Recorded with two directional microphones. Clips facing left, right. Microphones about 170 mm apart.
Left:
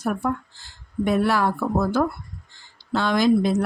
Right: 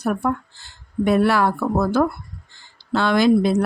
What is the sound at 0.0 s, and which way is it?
Speech, 65° right (ahead or behind).